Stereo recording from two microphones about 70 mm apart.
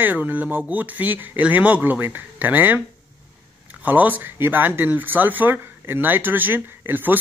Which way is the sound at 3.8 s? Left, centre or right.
Right.